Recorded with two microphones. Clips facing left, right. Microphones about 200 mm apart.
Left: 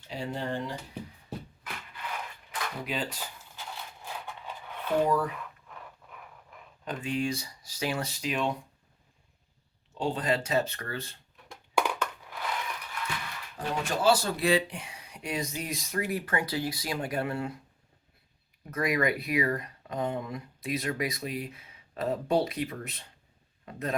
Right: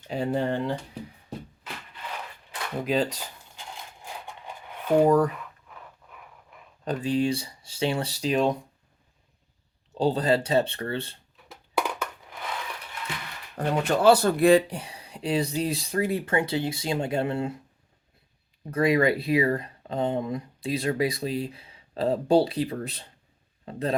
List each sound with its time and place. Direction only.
0.1 s speech: 55° right (ahead or behind)
2.5 s speech: 40° right (ahead or behind)
4.9 s speech: 45° right (ahead or behind)
5.6 s a sound: centre (ahead or behind)
6.8 s speech: 35° right (ahead or behind)
10.0 s speech: 35° right (ahead or behind)
11.4 s crushing: 10° right (ahead or behind)
13.6 s speech: 60° right (ahead or behind); by 17.5 s 25° right (ahead or behind)
18.6 s speech: 30° right (ahead or behind)